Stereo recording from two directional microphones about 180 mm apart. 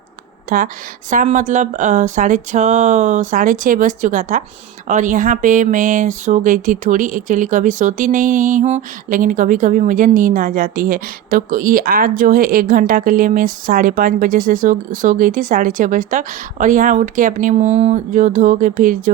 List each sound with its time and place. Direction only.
0.5 s speech: 50° right (ahead or behind)